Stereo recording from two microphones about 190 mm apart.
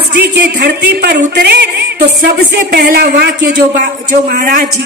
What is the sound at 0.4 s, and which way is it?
Speech, 60° right (ahead or behind).